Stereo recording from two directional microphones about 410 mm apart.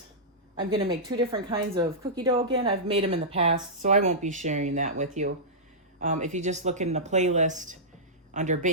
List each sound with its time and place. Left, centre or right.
0.5 s a woman's voice: centre